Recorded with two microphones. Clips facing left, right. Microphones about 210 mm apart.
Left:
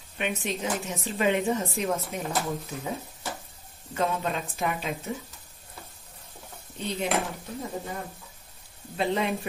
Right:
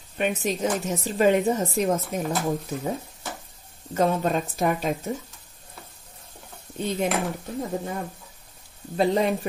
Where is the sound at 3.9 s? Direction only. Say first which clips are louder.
Right 6 dB; 45° right (ahead or behind).